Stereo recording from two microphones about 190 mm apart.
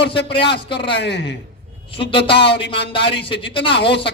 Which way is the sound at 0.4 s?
65° left (ahead or behind).